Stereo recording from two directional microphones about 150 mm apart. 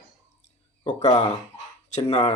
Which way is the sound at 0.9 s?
25° left (ahead or behind).